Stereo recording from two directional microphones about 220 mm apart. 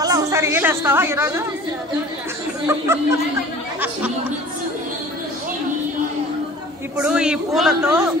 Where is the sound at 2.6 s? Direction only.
10° right (ahead or behind).